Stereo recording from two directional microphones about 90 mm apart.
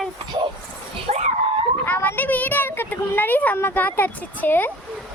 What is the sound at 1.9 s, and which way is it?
Speech, 20° left (ahead or behind).